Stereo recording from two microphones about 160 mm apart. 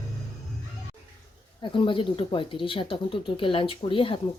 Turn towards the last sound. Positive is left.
turn(degrees=35)  # may be behind; listen again after turning